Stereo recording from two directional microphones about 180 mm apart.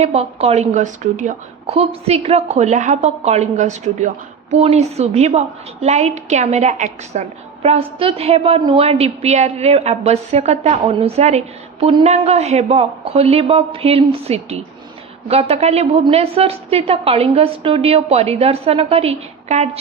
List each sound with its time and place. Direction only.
0.0 s a woman's voice: 35° right (ahead or behind)